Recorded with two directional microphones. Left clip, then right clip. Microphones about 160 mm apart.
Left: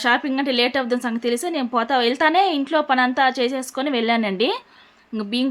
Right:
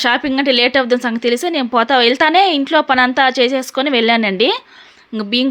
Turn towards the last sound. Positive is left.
turn(degrees=-25)  # may be behind; listen again after turning